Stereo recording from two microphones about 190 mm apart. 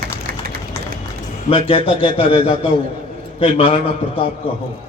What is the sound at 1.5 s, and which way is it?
A man's voice, 30° left (ahead or behind).